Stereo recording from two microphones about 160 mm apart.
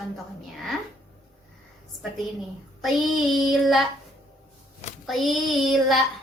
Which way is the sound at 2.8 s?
Centre (ahead or behind).